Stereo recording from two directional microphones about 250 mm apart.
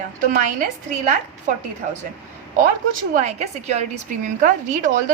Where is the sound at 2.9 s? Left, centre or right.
Right.